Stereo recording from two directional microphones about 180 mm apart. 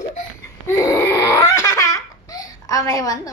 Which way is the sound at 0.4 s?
15° left (ahead or behind).